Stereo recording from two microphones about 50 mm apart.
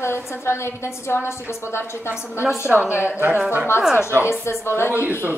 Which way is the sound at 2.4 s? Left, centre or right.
Centre.